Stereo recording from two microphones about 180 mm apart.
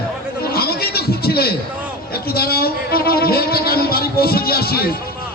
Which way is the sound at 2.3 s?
60° left (ahead or behind).